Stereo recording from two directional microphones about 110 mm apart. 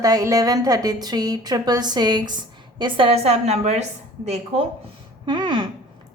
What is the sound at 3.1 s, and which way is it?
A woman's voice, 70° right (ahead or behind).